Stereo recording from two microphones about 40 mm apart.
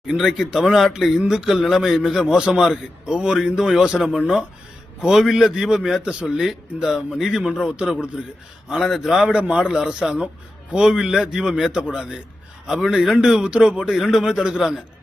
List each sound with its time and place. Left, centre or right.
0.2 s a man's voice: centre
2.3 s a man's voice: centre
6.0 s a man's voice: right
8.8 s a man's voice: centre
9.2 s a man's voice: right
13.9 s a man's voice: centre